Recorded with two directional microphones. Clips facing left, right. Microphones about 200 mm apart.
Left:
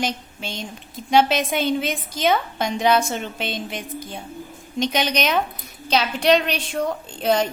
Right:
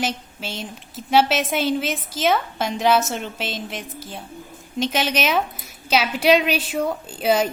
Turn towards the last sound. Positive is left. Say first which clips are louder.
# right 1 dB
turn(degrees=-5)  # may be behind; listen again after turning